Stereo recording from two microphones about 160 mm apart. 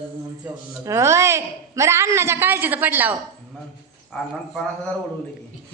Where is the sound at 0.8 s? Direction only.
15° right (ahead or behind).